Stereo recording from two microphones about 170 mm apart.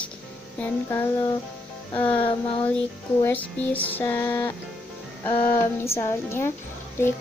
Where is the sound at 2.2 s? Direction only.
30° left (ahead or behind).